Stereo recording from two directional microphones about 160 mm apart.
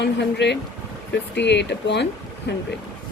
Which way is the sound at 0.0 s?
90° left.